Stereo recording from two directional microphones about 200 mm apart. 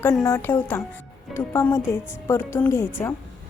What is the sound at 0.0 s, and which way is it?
Speech, 15° left (ahead or behind).